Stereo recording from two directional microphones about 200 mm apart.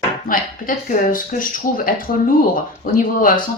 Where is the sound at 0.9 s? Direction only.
45° left (ahead or behind).